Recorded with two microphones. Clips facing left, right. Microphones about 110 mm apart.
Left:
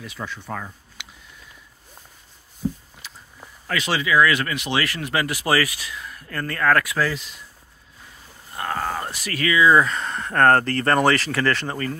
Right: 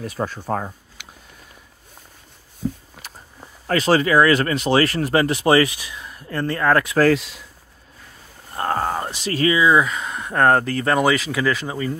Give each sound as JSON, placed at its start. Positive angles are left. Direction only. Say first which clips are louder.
{"t": 0.0, "sound": "speech", "louder": "right 7 dB", "side_deg": -45}
{"t": 3.0, "sound": "a sound", "louder": "right 2 dB", "side_deg": -50}
{"t": 3.6, "sound": "speech", "louder": "right 7 dB", "side_deg": -40}
{"t": 7.1, "sound": "speech", "louder": "right 11 dB", "side_deg": -85}
{"t": 8.5, "sound": "speech", "louder": "right 4 dB", "side_deg": -35}
{"t": 9.7, "sound": "speech", "louder": "even", "side_deg": -5}